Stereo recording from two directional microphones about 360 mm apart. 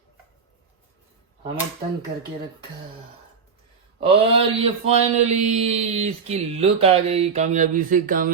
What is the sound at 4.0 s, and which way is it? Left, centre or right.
Speech, centre.